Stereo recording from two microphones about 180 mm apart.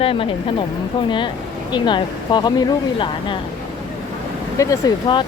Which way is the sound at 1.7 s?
25° left (ahead or behind).